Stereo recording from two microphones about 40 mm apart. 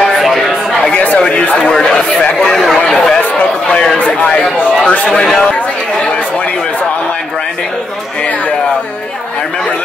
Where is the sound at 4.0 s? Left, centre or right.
Left.